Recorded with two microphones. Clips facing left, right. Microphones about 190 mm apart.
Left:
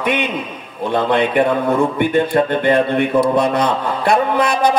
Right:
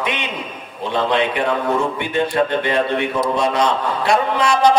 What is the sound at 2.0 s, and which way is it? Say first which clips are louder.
A man's voice: left 4 dB; 55° left (ahead or behind).